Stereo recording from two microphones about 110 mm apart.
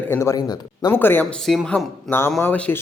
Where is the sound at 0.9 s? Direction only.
20° left (ahead or behind).